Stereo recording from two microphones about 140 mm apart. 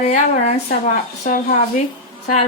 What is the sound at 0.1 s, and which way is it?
Speech, 60° left (ahead or behind).